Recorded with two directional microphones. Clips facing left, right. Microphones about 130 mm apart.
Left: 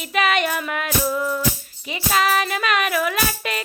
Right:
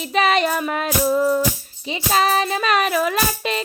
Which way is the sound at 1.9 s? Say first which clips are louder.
Right 2 dB; 30° right (ahead or behind).